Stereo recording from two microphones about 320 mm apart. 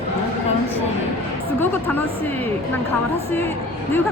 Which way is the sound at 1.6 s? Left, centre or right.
Centre.